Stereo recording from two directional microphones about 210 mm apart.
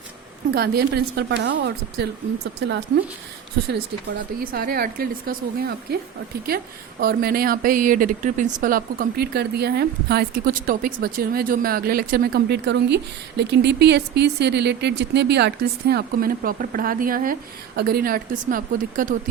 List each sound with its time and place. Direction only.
0.5 s speech: 45° right (ahead or behind)
4.5 s speech: 45° right (ahead or behind)
7.0 s speech: 45° right (ahead or behind)